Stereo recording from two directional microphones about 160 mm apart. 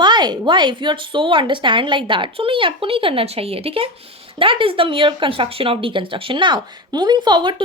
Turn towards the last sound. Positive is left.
turn(degrees=-30)  # may be behind; listen again after turning